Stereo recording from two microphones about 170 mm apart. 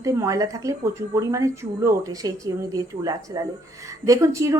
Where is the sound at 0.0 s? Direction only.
20° right (ahead or behind).